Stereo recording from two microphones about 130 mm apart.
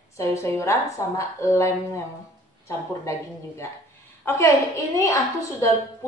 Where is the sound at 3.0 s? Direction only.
20° left (ahead or behind).